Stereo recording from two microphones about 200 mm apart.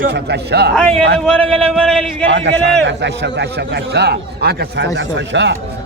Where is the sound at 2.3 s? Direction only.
65° right (ahead or behind).